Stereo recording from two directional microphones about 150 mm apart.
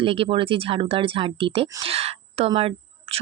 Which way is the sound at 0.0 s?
35° right (ahead or behind).